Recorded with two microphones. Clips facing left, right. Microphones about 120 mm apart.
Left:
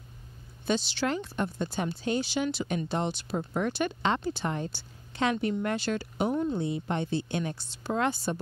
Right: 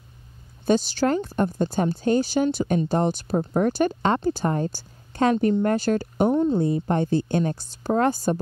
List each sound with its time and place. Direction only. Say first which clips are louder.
0.7 s speech: right 8 dB; 45° right (ahead or behind)
6.3 s speech: right 8 dB; 30° right (ahead or behind)
6.6 s speech: right 8 dB; 45° right (ahead or behind)